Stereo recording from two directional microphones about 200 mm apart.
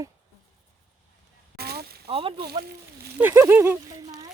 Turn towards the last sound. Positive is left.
turn(degrees=-15)  # may be behind; listen again after turning